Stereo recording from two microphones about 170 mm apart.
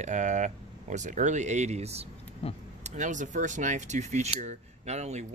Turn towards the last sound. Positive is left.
turn(degrees=-40)  # may be behind; listen again after turning